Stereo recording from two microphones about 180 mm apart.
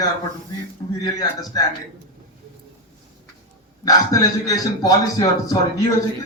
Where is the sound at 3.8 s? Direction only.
20° left (ahead or behind).